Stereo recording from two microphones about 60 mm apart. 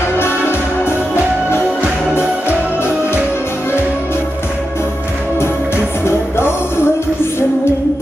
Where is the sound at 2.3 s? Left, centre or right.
Right.